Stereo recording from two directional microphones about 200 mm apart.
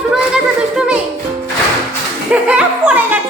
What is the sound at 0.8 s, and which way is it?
Speech, 5° right (ahead or behind).